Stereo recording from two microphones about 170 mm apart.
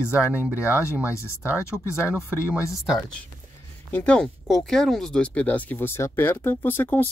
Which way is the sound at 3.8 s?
10° left (ahead or behind).